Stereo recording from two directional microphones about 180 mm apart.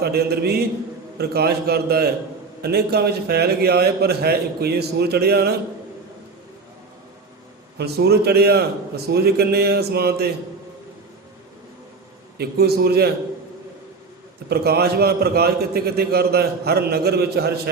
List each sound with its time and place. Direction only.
0.0 s a man's voice: 60° right (ahead or behind)
7.8 s a man's voice: 65° right (ahead or behind)
12.4 s a man's voice: 60° right (ahead or behind)
14.5 s a man's voice: 60° right (ahead or behind)